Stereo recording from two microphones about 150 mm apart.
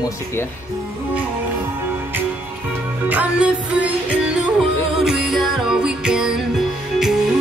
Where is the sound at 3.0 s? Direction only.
10° right (ahead or behind).